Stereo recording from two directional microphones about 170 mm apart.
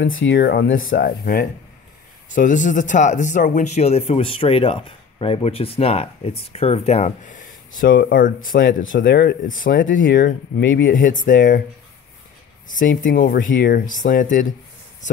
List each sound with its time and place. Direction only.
0.0 s speech: 90° left; by 1.5 s 60° left (ahead or behind)
2.3 s speech: 50° left (ahead or behind)
9.0 s speech: 80° left; by 11.6 s 55° left (ahead or behind)
12.6 s speech: 50° left (ahead or behind)